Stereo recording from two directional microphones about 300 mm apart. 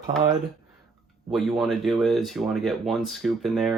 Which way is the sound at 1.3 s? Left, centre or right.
Centre.